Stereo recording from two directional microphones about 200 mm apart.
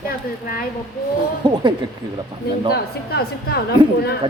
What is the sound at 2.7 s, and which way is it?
Speech, 50° left (ahead or behind).